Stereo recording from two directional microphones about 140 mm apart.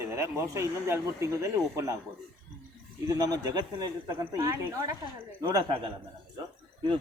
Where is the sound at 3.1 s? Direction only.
25° right (ahead or behind).